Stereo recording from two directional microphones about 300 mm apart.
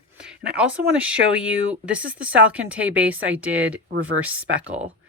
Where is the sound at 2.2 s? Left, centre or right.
Centre.